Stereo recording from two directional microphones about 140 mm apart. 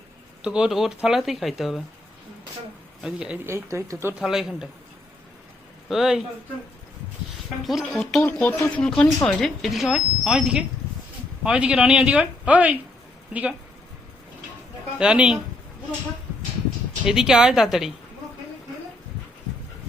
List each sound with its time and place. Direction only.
0.4 s speech: 5° right (ahead or behind)
3.0 s speech: 5° right (ahead or behind)
3.4 s speech: 20° right (ahead or behind)
4.2 s speech: 5° right (ahead or behind)
5.9 s speech: 5° right (ahead or behind)
7.6 s speech: centre (ahead or behind)
8.2 s speech: 15° left (ahead or behind); by 12.7 s 10° right (ahead or behind)
14.9 s speech: 5° right (ahead or behind)
17.1 s speech: 5° right (ahead or behind)